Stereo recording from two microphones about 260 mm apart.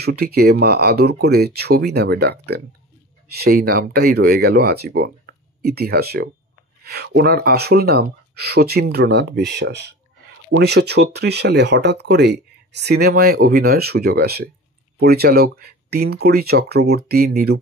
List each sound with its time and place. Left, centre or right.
0.0 s speech: right